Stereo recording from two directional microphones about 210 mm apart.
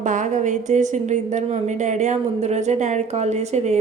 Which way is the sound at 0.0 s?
35° right (ahead or behind).